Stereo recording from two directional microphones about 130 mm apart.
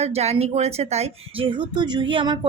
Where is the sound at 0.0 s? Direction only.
55° right (ahead or behind).